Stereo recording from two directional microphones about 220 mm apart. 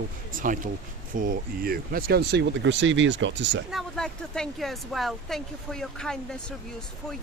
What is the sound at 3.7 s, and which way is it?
Speech, centre (ahead or behind).